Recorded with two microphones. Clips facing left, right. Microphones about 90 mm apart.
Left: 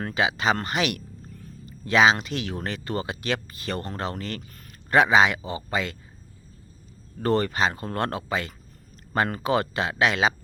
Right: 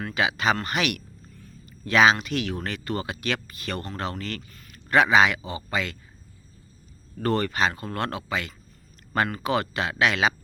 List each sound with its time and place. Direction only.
0.0 s speech: 25° left (ahead or behind)
7.2 s speech: 25° left (ahead or behind)